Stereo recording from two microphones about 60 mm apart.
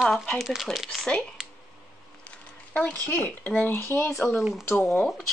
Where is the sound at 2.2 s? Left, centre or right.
Left.